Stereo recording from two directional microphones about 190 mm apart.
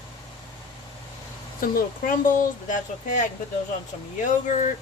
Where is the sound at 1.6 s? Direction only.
50° left (ahead or behind).